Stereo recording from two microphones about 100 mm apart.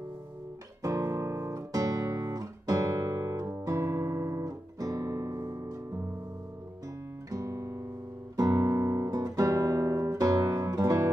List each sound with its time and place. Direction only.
0.8 s guitar: 35° right (ahead or behind)
4.5 s guitar: 40° right (ahead or behind)
7.2 s music: 35° right (ahead or behind)
8.4 s guitar: 35° right (ahead or behind)